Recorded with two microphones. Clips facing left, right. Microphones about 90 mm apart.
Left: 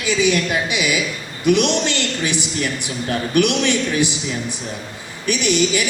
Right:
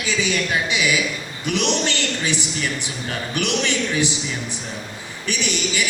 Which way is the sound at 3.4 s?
20° left (ahead or behind).